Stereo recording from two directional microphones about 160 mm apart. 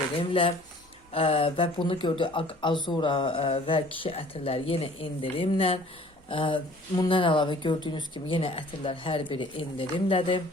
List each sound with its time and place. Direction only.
0.2 s speech: 35° left (ahead or behind)